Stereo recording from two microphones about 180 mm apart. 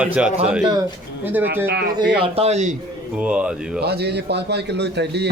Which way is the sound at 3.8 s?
70° right (ahead or behind).